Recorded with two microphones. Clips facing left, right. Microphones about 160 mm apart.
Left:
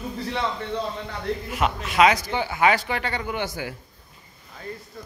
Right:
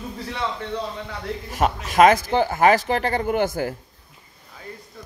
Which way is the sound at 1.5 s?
45° right (ahead or behind).